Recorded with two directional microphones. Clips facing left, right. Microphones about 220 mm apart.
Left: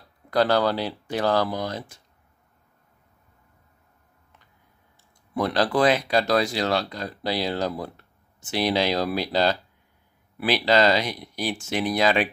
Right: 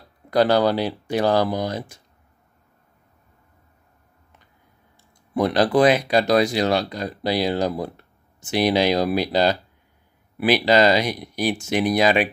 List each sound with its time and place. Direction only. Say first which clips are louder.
0.3 s speech: right 3 dB; 15° right (ahead or behind)
5.3 s speech: right 4 dB; 15° right (ahead or behind)